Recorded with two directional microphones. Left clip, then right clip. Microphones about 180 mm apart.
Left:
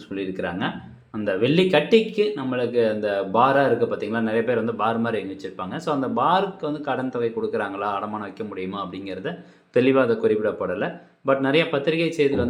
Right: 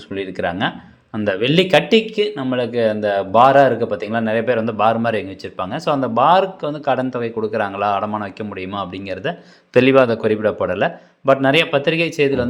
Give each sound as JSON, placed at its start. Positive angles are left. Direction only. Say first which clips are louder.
{"t": 0.1, "sound": "speech", "louder": "right 6 dB", "side_deg": -30}